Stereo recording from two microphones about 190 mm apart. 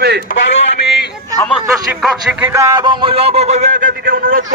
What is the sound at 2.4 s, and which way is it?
A man's voice, 15° right (ahead or behind).